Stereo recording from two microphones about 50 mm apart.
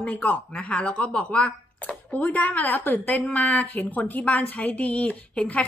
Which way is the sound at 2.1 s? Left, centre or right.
Left.